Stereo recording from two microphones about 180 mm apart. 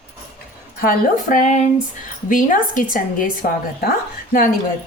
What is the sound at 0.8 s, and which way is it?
A woman's voice, 50° left (ahead or behind).